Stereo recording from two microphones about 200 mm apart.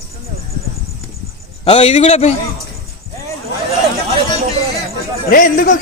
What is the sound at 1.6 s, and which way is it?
Speech, 30° left (ahead or behind).